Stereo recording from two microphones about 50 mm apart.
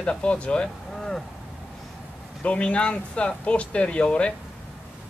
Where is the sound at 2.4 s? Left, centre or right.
Left.